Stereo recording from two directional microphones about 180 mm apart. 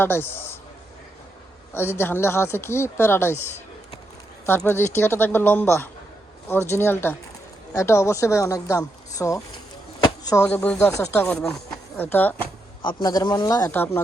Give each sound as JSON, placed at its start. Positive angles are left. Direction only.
{"t": 0.0, "sound": "speech", "side_deg": 10}
{"t": 1.7, "sound": "speech", "side_deg": 10}
{"t": 12.8, "sound": "a man's voice", "side_deg": 25}